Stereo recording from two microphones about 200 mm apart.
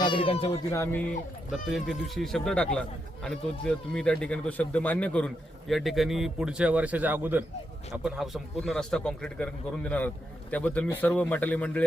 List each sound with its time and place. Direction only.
0.0 s speech: 25° left (ahead or behind)
0.7 s speech: 15° left (ahead or behind)